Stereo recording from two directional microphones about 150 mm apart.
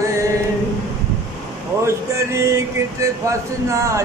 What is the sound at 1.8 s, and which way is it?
Speech, 20° right (ahead or behind).